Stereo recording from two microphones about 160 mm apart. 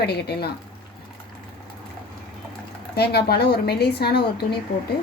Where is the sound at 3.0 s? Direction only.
85° left.